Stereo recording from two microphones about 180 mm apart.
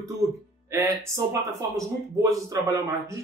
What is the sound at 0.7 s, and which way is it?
Speech, 15° right (ahead or behind).